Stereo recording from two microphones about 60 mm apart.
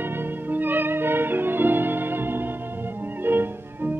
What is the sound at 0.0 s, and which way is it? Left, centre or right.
Music, right.